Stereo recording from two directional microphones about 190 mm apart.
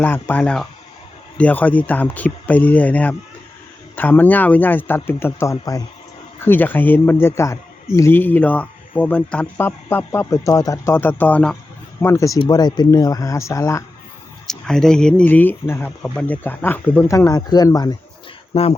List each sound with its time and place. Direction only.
0.0 s speech: 10° left (ahead or behind)
14.4 s speech: centre (ahead or behind); by 18.7 s 30° left (ahead or behind)